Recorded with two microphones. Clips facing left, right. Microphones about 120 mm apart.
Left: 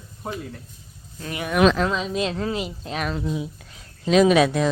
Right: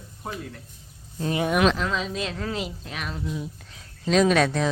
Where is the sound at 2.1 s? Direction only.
25° left (ahead or behind).